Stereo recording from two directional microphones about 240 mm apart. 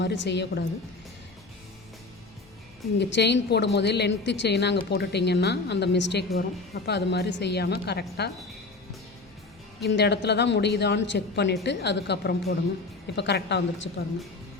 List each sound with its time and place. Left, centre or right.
0.0 s a woman's voice: left
3.0 s a woman's voice: left
9.8 s a woman's voice: left